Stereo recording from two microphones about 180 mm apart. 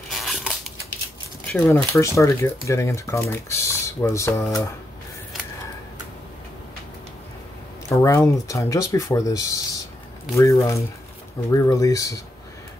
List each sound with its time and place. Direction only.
0.1 s a sound: centre (ahead or behind)
1.7 s speech: 15° left (ahead or behind)
7.9 s speech: 15° left (ahead or behind)